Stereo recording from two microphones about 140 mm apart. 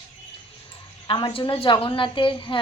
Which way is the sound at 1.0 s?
40° left (ahead or behind).